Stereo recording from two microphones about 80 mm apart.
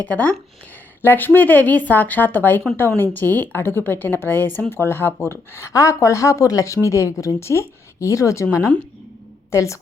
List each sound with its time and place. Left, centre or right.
0.0 s a woman's voice: centre; by 8.4 s left
9.5 s a woman's voice: left